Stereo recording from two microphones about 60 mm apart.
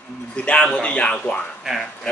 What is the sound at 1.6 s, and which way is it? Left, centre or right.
Speech, centre.